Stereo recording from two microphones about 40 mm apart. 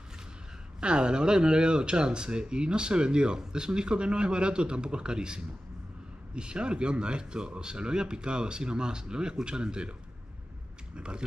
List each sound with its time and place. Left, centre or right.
0.7 s speech: right
11.0 s speech: right